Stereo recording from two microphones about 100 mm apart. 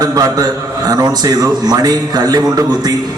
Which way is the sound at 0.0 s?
40° right (ahead or behind).